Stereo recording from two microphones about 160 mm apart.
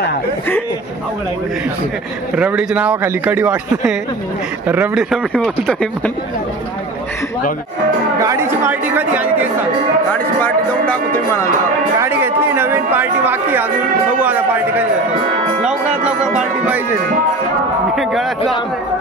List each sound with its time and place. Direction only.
2.3 s speech: 10° right (ahead or behind)
8.2 s speech: 20° right (ahead or behind)
10.1 s speech: 10° left (ahead or behind)
12.0 s speech: 15° right (ahead or behind)
17.9 s speech: centre (ahead or behind)